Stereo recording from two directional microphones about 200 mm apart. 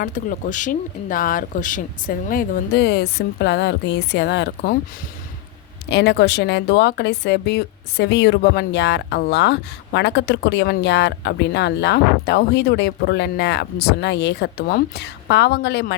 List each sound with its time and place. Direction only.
0.0 s speech: 40° left (ahead or behind)
5.9 s speech: 55° left (ahead or behind)